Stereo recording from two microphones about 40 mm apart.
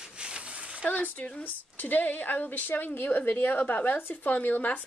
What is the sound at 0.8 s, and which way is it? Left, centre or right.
A woman's voice, left.